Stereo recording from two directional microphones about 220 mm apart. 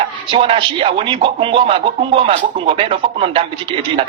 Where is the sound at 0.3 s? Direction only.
25° right (ahead or behind).